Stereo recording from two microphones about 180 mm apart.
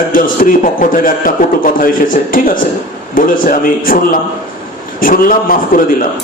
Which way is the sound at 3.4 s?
50° left (ahead or behind).